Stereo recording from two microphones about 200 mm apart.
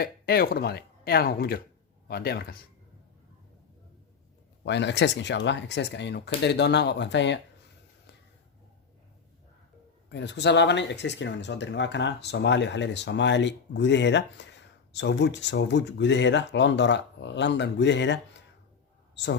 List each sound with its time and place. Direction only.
0.0 s speech: 50° left (ahead or behind)
4.6 s speech: 60° left (ahead or behind)
10.1 s speech: 60° left (ahead or behind)